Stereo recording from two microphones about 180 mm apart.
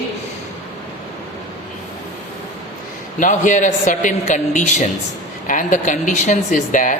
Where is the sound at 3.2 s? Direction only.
45° left (ahead or behind).